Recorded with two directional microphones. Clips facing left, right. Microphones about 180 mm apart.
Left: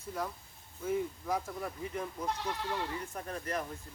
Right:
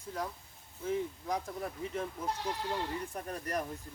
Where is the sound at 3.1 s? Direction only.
35° right (ahead or behind).